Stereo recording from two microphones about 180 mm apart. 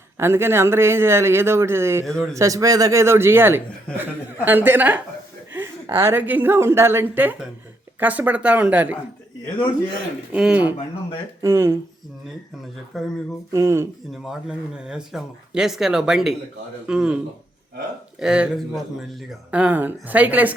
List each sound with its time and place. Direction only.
0.2 s a man's voice: 15° right (ahead or behind)
3.9 s speech: 5° left (ahead or behind)
4.4 s a man's voice: 10° right (ahead or behind)
5.5 s a sound: 10° right (ahead or behind)
6.0 s a man's voice: 10° right (ahead or behind)
10.3 s a man's voice: 5° right (ahead or behind)
12.9 s speech: centre (ahead or behind)
13.5 s a man's voice: 15° right (ahead or behind)
14.1 s speech: 5° right (ahead or behind)
18.2 s a man's voice: 5° right (ahead or behind)